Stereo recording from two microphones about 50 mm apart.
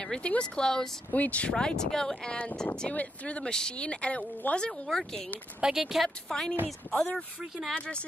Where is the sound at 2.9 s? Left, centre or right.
Left.